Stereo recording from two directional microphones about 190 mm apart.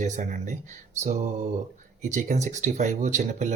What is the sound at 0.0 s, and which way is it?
Speech, 40° right (ahead or behind).